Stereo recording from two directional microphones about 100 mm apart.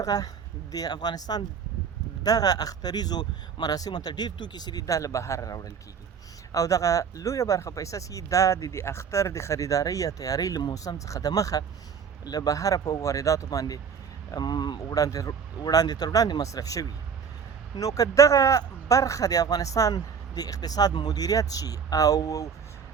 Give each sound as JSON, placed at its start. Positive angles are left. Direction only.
{"t": 0.0, "sound": "speech", "side_deg": 40}